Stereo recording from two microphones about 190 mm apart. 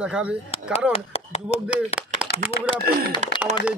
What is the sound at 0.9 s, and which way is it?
Speech, 30° left (ahead or behind).